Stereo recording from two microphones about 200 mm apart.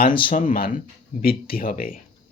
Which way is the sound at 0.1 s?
25° left (ahead or behind).